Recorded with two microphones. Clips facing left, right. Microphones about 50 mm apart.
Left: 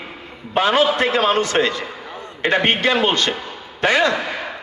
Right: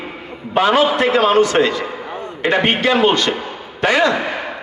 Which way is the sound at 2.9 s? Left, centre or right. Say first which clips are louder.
Right 4 dB; right.